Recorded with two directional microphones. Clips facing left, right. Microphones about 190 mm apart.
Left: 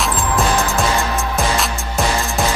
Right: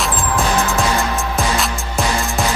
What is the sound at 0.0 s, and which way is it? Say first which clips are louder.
Music: left 1 dB; centre (ahead or behind).